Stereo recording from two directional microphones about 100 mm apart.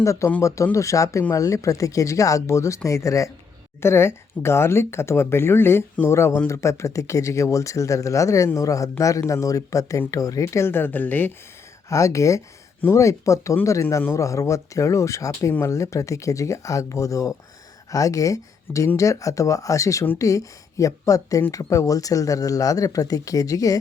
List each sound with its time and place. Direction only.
0.0 s speech: 30° left (ahead or behind)
11.9 s speech: 30° left (ahead or behind)